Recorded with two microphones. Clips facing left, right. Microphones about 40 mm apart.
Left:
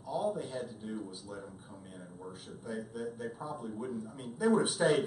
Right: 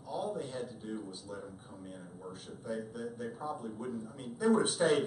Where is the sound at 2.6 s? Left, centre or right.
Centre.